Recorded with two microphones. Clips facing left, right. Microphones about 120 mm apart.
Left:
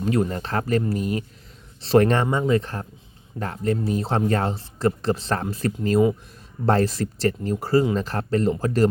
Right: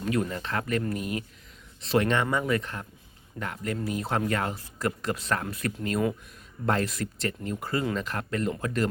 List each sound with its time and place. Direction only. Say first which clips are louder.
0.0 s speech: left 5 dB; 35° left (ahead or behind)
2.2 s speech: left 5 dB; 25° left (ahead or behind)